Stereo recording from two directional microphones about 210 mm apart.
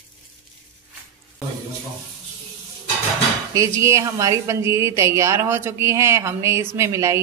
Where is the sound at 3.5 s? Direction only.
15° right (ahead or behind).